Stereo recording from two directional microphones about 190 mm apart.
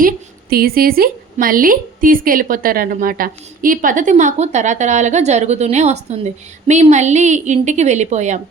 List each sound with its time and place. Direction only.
0.5 s a woman's voice: 50° right (ahead or behind)